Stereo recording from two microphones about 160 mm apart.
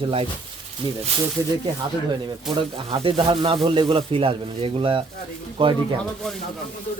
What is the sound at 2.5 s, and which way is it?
Speech, 35° right (ahead or behind).